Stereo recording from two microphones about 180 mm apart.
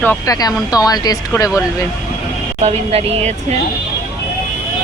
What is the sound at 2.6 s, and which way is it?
Speech, 35° right (ahead or behind).